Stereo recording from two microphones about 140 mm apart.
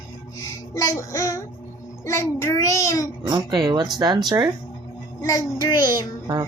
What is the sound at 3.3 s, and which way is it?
Speech, 30° right (ahead or behind).